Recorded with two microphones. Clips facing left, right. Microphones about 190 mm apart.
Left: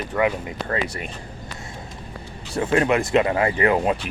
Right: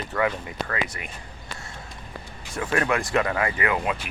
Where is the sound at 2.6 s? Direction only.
20° left (ahead or behind).